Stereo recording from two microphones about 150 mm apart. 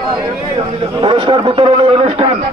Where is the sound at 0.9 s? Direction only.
35° right (ahead or behind).